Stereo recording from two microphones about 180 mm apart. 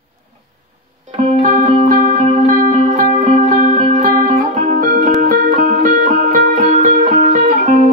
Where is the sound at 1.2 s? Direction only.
35° right (ahead or behind).